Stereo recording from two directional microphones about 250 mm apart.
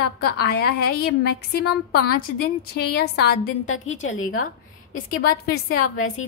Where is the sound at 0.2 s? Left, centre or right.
Left.